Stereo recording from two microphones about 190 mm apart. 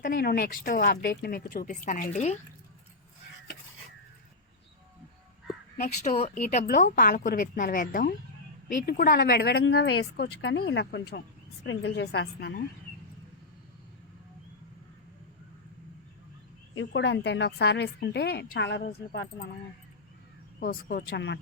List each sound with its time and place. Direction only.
0.0 s speech: 50° left (ahead or behind)
5.7 s speech: 40° left (ahead or behind)
6.7 s speech: 45° left (ahead or behind)
16.7 s speech: 70° left (ahead or behind)
20.6 s speech: 50° left (ahead or behind)